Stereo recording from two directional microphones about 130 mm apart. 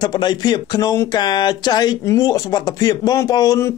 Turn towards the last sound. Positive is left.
turn(degrees=25)  # may be behind; listen again after turning